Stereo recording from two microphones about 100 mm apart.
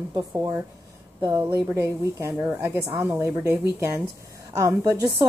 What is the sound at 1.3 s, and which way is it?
A woman's voice, 25° right (ahead or behind).